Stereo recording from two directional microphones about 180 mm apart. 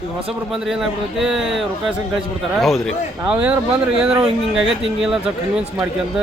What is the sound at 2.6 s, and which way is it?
Speech, centre (ahead or behind).